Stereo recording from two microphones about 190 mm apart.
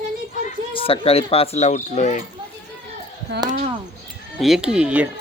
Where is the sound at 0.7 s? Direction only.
30° left (ahead or behind).